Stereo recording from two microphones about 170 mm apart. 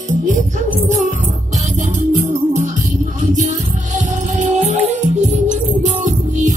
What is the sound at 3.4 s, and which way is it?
Music, 45° right (ahead or behind).